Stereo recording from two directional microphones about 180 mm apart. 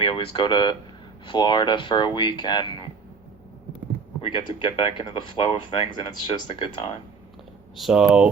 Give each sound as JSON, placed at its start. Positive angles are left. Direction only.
{"t": 0.0, "sound": "speech", "side_deg": 30}
{"t": 4.2, "sound": "speech", "side_deg": 25}
{"t": 7.8, "sound": "speech", "side_deg": 0}